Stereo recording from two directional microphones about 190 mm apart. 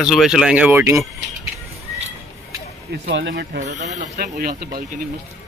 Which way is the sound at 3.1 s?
65° right (ahead or behind).